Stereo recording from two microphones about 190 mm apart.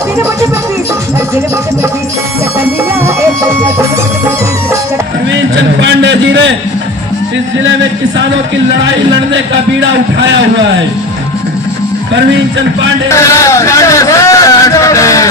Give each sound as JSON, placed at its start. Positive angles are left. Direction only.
{"t": 3.2, "sound": "music", "side_deg": -15}
{"t": 5.3, "sound": "a sound", "side_deg": -70}
{"t": 13.1, "sound": "a man's voice", "side_deg": 15}